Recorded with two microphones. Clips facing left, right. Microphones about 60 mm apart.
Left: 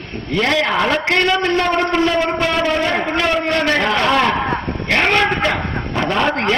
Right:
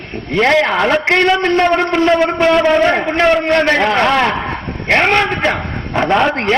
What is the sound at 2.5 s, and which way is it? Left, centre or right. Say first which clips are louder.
A man's voice: right 6 dB; right.